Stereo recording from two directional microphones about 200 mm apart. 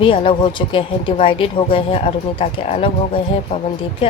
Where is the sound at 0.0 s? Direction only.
25° left (ahead or behind).